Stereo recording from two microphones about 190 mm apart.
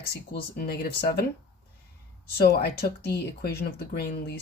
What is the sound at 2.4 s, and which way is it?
Speech, 55° left (ahead or behind).